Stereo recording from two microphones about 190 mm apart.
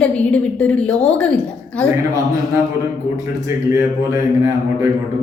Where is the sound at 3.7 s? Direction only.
15° right (ahead or behind).